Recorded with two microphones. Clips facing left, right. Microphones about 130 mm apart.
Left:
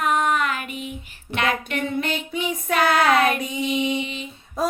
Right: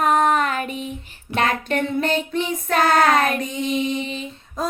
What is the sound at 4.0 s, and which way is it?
Music, 35° right (ahead or behind).